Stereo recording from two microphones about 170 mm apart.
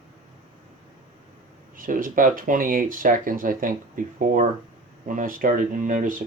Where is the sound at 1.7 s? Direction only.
55° right (ahead or behind).